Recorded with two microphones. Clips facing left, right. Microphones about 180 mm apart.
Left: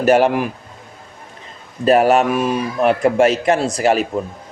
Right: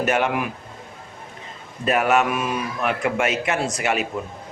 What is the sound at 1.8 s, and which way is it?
Speech, 35° left (ahead or behind).